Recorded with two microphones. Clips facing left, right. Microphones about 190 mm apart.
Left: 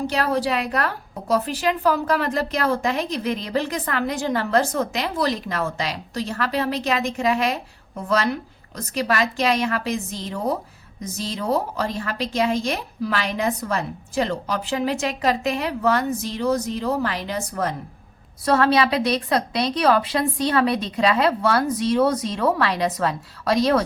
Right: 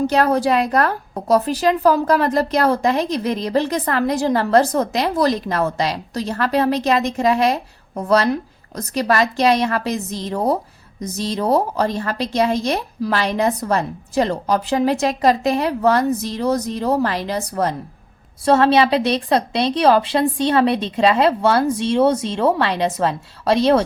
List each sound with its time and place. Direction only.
0.1 s a woman's voice: 45° right (ahead or behind)
18.4 s a woman's voice: 25° right (ahead or behind)